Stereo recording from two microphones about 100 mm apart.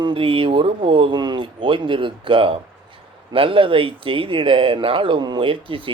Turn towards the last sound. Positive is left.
turn(degrees=-60)  # may be behind; listen again after turning